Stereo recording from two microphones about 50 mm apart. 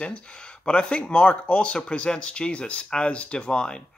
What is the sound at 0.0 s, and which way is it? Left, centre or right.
Speech, centre.